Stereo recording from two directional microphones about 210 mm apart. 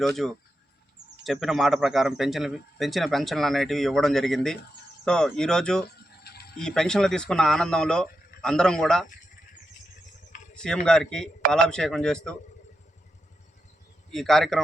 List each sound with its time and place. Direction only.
0.0 s speech: centre (ahead or behind)
6.3 s mechanisms: 50° left (ahead or behind)
6.6 s speech: 5° left (ahead or behind)
10.3 s a sound: 35° left (ahead or behind)
10.8 s speech: 5° left (ahead or behind)
14.1 s speech: centre (ahead or behind)